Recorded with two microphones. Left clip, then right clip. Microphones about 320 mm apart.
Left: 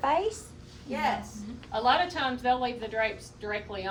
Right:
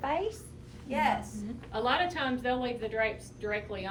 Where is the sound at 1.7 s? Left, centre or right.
Centre.